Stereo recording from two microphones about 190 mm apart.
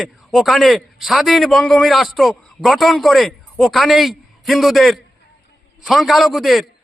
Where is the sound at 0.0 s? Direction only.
Centre (ahead or behind).